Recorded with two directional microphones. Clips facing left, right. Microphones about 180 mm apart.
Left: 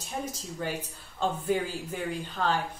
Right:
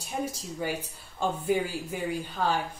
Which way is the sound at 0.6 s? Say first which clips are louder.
Right 2 dB; 10° right (ahead or behind).